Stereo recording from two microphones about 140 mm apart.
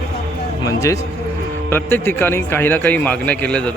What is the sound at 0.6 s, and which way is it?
A man's voice, 20° left (ahead or behind).